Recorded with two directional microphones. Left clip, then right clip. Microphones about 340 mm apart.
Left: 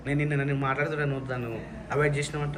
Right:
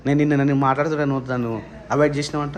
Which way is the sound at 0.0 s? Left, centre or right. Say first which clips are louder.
Right 10 dB; centre.